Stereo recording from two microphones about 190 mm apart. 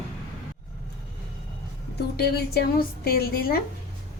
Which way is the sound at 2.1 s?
55° left (ahead or behind).